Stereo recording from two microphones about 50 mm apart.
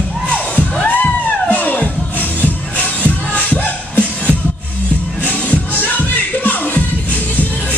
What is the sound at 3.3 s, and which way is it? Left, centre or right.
Music, left.